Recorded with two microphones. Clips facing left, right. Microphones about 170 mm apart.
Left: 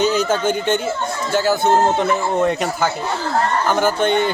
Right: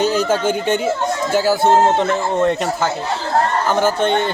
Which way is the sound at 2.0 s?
5° left (ahead or behind).